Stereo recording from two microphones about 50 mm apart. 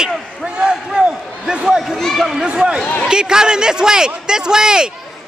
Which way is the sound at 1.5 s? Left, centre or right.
Centre.